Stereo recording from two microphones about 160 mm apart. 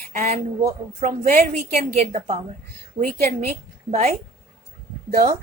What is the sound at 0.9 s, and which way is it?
A woman's voice, 45° right (ahead or behind).